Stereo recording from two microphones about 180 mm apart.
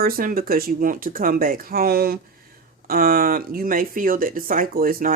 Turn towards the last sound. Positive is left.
turn(degrees=-50)  # may be behind; listen again after turning